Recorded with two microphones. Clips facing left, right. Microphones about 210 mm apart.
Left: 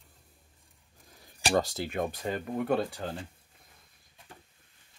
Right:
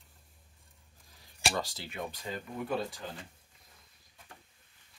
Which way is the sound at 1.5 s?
45° left (ahead or behind).